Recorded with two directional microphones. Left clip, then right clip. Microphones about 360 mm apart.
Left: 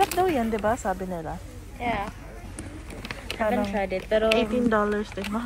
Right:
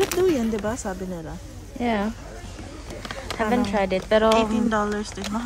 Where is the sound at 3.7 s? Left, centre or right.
Right.